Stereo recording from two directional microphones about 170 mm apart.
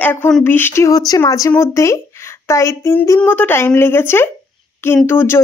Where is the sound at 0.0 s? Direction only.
10° left (ahead or behind).